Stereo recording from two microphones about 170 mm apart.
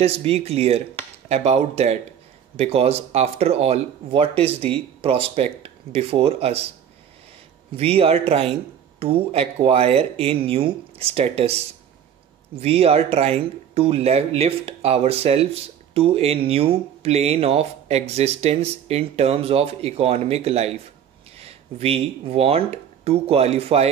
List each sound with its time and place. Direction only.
0.0 s speech: 35° right (ahead or behind)
7.7 s speech: 35° right (ahead or behind)